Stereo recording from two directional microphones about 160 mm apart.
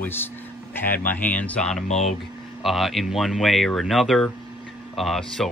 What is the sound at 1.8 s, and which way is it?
Speech, 45° left (ahead or behind).